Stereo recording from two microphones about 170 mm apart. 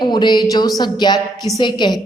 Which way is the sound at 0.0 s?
25° left (ahead or behind).